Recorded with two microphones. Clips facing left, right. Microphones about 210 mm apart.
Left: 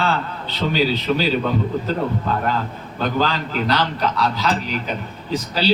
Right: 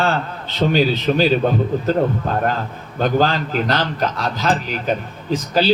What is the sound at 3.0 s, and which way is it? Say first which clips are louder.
A man's voice: right 4 dB; 45° right (ahead or behind).